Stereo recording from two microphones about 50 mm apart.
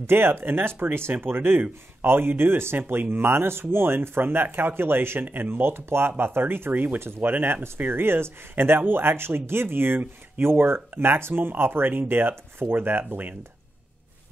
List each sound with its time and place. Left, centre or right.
0.0 s speech: right
6.7 s speech: right